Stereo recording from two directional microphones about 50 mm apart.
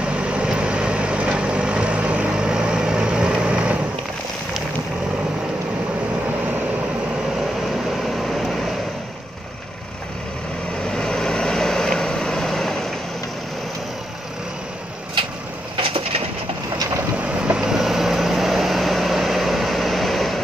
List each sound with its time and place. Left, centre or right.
0.0 s vehicle: right
8.2 s vehicle: centre
10.9 s vehicle: centre
17.5 s vehicle: centre